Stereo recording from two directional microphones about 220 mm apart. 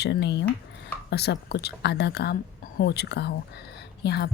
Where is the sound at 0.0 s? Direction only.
50° left (ahead or behind).